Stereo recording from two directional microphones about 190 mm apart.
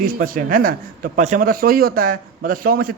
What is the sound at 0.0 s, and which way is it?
A man's voice, 45° right (ahead or behind).